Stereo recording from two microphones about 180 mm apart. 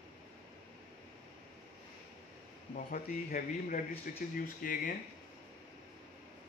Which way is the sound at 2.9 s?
50° left (ahead or behind).